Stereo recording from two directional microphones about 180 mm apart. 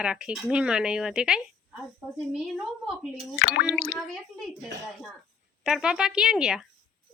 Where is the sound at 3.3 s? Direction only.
60° left (ahead or behind).